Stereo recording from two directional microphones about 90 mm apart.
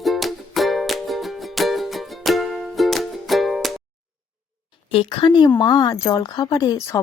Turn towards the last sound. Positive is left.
turn(degrees=45)  # may be behind; listen again after turning